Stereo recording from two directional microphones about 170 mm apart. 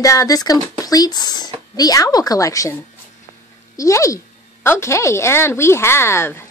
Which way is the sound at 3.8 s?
15° left (ahead or behind).